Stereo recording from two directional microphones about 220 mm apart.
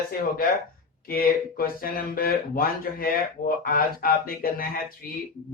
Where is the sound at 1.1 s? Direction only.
40° left (ahead or behind).